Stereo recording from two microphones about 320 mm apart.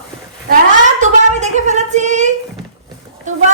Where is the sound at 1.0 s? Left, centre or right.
Right.